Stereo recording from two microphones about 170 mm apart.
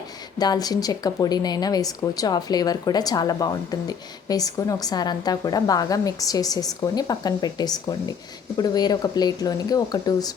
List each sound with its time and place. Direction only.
0.3 s speech: 25° left (ahead or behind)